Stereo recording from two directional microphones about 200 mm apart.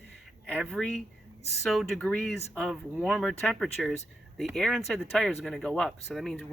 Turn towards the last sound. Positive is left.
turn(degrees=0)  # may be behind; listen again after turning